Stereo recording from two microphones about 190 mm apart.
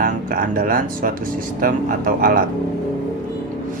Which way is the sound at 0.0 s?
45° right (ahead or behind).